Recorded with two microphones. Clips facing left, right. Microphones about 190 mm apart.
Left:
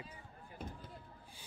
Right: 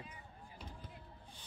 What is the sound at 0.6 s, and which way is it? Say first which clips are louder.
Speech: left 7 dB; 55° left (ahead or behind).